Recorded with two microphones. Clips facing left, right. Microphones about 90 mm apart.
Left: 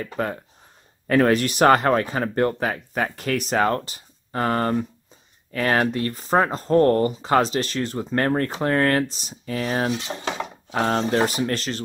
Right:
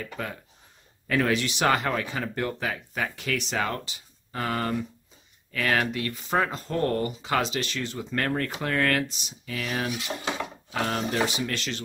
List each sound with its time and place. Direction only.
0.0 s speech: 40° left (ahead or behind)